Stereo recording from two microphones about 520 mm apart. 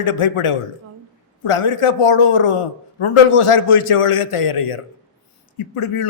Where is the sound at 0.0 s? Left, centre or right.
Left.